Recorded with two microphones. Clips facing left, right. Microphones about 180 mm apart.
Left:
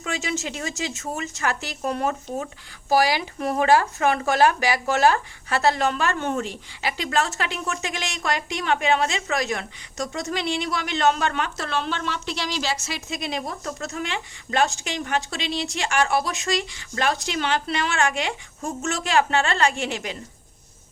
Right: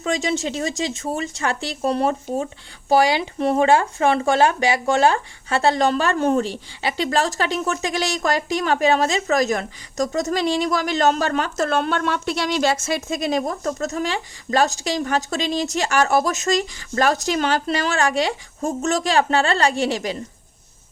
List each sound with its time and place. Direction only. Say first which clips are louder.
0.0 s speech: right 6 dB; 35° right (ahead or behind)